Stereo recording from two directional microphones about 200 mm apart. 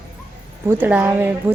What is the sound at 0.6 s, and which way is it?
Speech, 10° right (ahead or behind).